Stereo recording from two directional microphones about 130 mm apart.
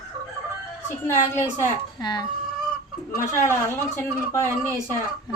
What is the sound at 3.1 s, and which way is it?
Speech, 20° left (ahead or behind).